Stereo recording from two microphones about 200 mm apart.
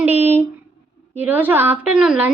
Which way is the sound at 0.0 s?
10° right (ahead or behind).